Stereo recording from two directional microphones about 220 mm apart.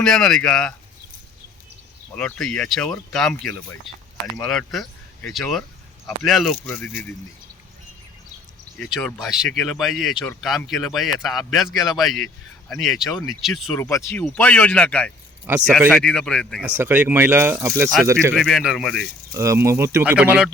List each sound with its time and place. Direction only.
0.0 s speech: 5° left (ahead or behind)
2.1 s speech: 5° left (ahead or behind)
8.8 s speech: centre (ahead or behind)
15.5 s speech: 10° right (ahead or behind)
15.9 s speech: 5° left (ahead or behind)
16.7 s speech: 10° right (ahead or behind)
18.3 s speech: centre (ahead or behind)
19.3 s speech: 15° right (ahead or behind)